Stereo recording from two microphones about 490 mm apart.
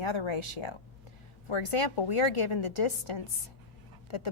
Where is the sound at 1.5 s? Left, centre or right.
Left.